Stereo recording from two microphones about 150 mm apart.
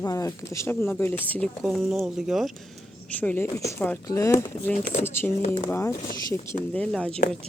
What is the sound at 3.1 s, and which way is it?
Speech, 10° left (ahead or behind).